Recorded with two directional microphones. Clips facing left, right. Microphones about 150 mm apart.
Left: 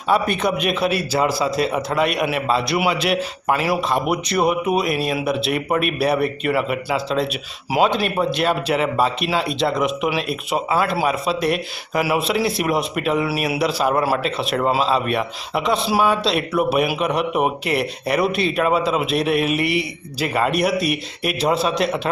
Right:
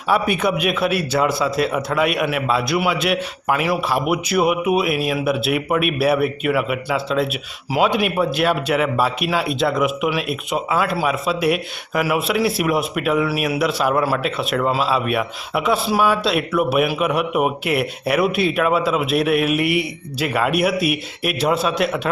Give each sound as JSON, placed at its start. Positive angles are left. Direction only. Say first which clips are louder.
{"t": 0.1, "sound": "speech", "louder": "even", "side_deg": -5}